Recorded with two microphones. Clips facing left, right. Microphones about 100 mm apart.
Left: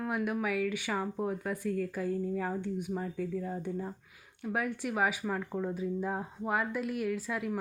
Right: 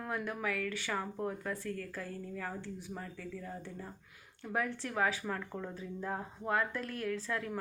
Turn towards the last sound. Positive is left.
turn(degrees=10)  # may be behind; listen again after turning